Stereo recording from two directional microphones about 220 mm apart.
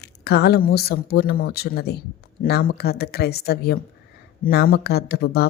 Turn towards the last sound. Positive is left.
turn(degrees=45)  # may be behind; listen again after turning